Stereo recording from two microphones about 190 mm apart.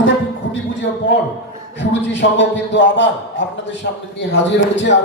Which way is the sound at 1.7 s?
70° left (ahead or behind).